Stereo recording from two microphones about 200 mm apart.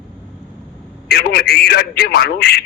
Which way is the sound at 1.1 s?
50° left (ahead or behind).